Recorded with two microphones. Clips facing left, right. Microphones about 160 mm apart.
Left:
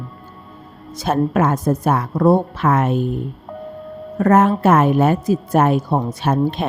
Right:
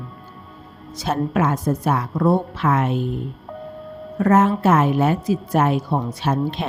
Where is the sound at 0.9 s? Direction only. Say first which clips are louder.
Left 4 dB; 50° left (ahead or behind).